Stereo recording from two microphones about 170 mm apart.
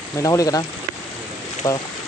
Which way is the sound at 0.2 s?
20° left (ahead or behind).